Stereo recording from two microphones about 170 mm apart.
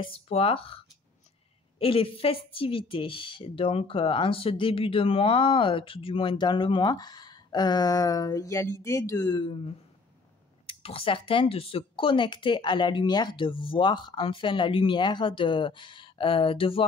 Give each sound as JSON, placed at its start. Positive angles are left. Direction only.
{"t": 0.0, "sound": "speech", "side_deg": 35}